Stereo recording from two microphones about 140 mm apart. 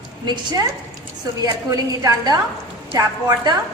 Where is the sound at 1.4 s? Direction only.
25° right (ahead or behind).